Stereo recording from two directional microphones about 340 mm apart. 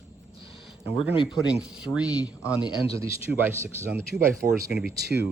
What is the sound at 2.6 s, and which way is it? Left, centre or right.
Speech, centre.